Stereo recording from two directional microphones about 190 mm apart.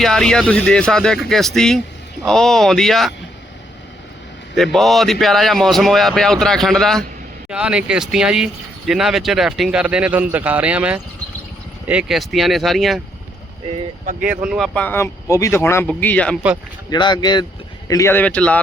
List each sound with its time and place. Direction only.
0.0 s a man's voice: 5° left (ahead or behind)
4.5 s a man's voice: centre (ahead or behind)
14.0 s speech: 40° right (ahead or behind)
14.3 s a man's voice: 5° right (ahead or behind)
16.9 s speech: 25° left (ahead or behind); by 18.6 s 5° left (ahead or behind)